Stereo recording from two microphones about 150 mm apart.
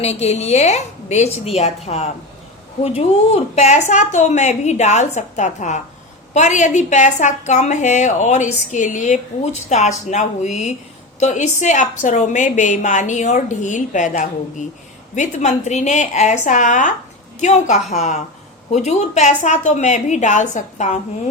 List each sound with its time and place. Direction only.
0.0 s a woman's voice: 45° left (ahead or behind)